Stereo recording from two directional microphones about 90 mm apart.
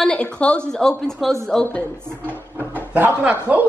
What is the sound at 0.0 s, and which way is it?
A woman's voice, 10° left (ahead or behind).